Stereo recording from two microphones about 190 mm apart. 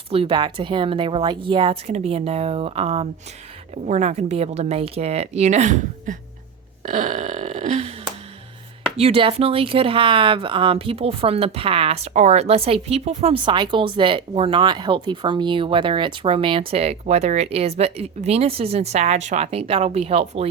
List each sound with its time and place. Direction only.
0.1 s a woman's voice: 30° right (ahead or behind)
6.8 s a sound: 40° right (ahead or behind)
9.0 s speech: 30° right (ahead or behind)